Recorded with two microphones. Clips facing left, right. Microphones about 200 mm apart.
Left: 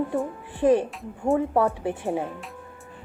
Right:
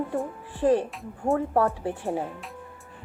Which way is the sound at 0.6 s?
20° left (ahead or behind).